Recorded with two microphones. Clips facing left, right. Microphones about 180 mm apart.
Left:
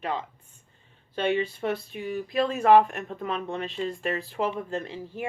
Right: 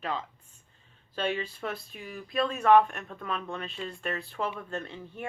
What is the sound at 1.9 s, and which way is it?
Speech, centre (ahead or behind).